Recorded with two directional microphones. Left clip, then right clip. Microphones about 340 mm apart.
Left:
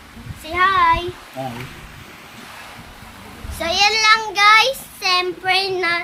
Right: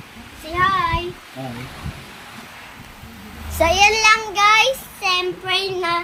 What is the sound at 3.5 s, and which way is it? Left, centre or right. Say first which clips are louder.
Child singing: right 2 dB; centre.